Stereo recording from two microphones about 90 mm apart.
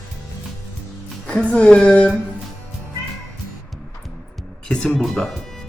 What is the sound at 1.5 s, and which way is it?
Speech, 10° left (ahead or behind).